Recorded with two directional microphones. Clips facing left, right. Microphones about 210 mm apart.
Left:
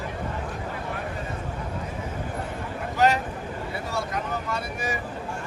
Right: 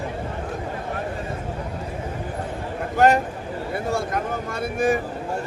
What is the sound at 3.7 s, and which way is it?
Vehicle, 50° right (ahead or behind).